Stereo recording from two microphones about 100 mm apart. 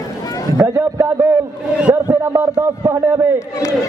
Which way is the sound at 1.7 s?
15° right (ahead or behind).